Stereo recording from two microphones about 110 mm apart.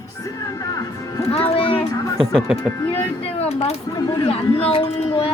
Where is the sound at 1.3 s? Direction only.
60° left (ahead or behind).